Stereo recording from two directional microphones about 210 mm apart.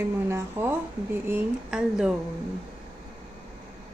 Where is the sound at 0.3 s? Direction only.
15° right (ahead or behind).